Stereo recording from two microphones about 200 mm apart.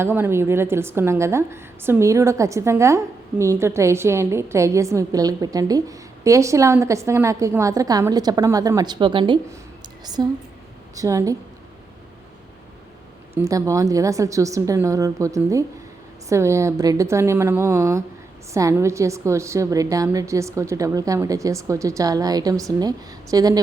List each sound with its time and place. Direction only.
0.0 s a woman's voice: 10° right (ahead or behind)
13.4 s a woman's voice: 15° right (ahead or behind)